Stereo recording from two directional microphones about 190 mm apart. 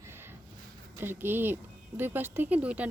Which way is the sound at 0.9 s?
10° right (ahead or behind).